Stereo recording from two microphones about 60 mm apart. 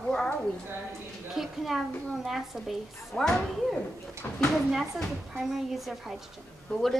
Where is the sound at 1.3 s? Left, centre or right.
Centre.